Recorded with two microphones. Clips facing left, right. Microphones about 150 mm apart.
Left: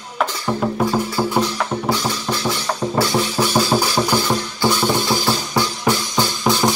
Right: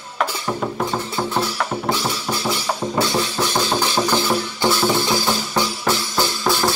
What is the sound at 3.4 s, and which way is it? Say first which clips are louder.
Music: left 5 dB; 10° left (ahead or behind).